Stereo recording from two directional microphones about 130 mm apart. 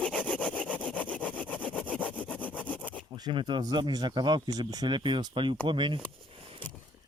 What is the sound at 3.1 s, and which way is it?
Speech, 35° right (ahead or behind).